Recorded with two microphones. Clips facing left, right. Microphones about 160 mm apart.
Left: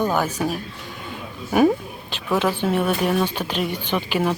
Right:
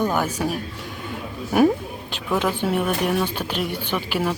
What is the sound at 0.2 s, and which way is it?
Speech, 10° right (ahead or behind).